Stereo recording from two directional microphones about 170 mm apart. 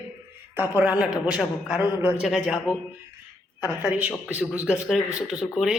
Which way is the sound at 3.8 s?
5° right (ahead or behind).